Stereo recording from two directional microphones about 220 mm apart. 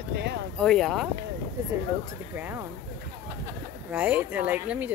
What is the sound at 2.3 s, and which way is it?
Speech, 10° right (ahead or behind).